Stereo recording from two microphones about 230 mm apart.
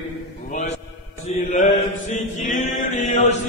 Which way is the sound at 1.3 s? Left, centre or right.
Left.